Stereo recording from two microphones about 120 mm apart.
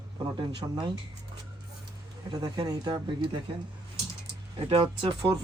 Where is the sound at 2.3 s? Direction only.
35° right (ahead or behind).